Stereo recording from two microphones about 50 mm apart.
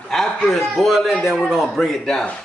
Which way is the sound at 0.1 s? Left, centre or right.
Centre.